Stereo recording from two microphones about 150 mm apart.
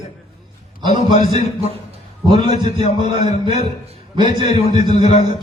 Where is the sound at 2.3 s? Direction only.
45° left (ahead or behind).